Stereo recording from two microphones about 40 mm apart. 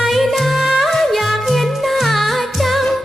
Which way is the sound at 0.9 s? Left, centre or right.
Centre.